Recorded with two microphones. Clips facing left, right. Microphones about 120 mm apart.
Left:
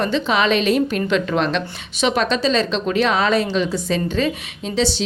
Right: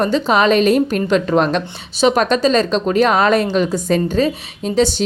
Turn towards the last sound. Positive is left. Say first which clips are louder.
# right 5 dB
turn(degrees=-50)  # may be behind; listen again after turning